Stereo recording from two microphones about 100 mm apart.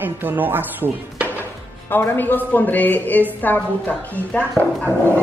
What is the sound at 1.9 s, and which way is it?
Speech, 20° left (ahead or behind).